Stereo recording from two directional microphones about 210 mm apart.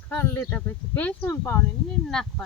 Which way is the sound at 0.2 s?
10° left (ahead or behind).